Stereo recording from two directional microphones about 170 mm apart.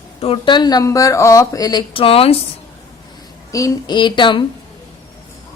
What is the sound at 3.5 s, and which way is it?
Speech, 20° left (ahead or behind).